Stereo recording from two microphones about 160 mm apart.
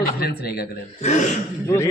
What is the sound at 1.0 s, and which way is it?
Speech, 45° left (ahead or behind).